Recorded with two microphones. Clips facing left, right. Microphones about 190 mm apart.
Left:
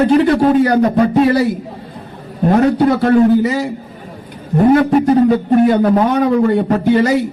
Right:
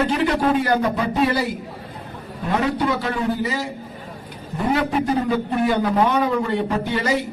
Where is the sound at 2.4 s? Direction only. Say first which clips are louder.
Left 10 dB; 45° left (ahead or behind); by 3.6 s 60° left (ahead or behind).